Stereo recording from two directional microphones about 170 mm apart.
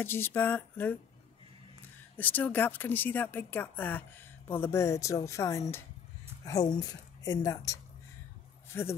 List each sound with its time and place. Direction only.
0.0 s speech: 15° left (ahead or behind)
2.1 s a woman's voice: 10° left (ahead or behind)
8.7 s speech: 15° left (ahead or behind)